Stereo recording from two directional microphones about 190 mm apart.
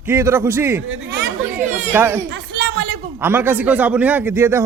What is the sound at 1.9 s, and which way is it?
A man's voice, 10° right (ahead or behind).